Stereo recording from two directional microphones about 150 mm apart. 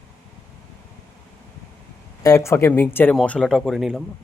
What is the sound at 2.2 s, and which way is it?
Speech, 20° left (ahead or behind).